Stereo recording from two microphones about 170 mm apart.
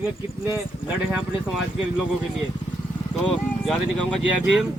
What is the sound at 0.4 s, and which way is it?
Speech, 15° right (ahead or behind).